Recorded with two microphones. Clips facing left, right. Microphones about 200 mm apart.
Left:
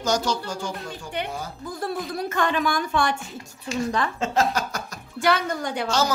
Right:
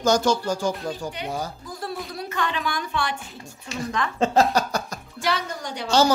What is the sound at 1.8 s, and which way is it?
A woman's voice, 50° left (ahead or behind).